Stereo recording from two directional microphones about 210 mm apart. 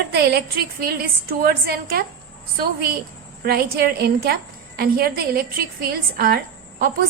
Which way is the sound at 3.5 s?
45° right (ahead or behind).